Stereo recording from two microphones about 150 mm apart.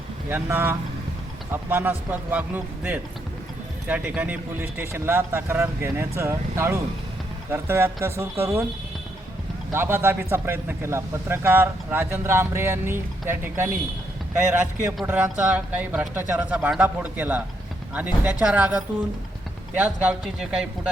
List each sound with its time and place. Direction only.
0.3 s speech: 15° right (ahead or behind)
9.7 s speech: 15° right (ahead or behind)